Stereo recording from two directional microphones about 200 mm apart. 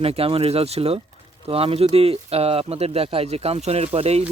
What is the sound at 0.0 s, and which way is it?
Speech, 30° right (ahead or behind).